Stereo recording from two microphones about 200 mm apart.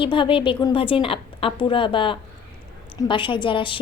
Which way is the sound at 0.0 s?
25° left (ahead or behind).